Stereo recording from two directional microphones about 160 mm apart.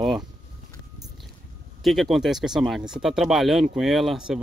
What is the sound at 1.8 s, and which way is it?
Speech, centre (ahead or behind).